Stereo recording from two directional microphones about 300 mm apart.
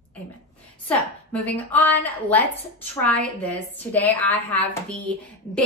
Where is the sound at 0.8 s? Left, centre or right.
Centre.